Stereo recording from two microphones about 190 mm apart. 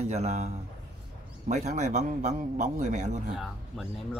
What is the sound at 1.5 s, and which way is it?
A man's voice, 40° right (ahead or behind).